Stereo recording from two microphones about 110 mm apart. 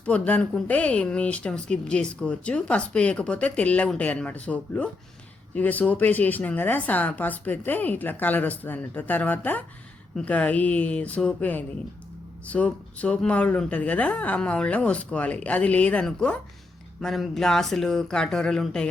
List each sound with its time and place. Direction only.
0.0 s speech: 10° left (ahead or behind)